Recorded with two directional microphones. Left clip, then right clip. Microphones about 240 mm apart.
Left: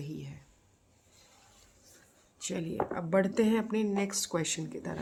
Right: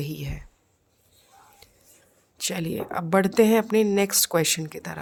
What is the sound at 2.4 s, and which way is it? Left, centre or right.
Speech, right.